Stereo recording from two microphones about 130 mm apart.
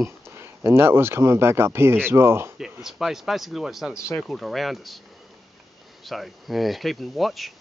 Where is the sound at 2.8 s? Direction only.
Centre (ahead or behind).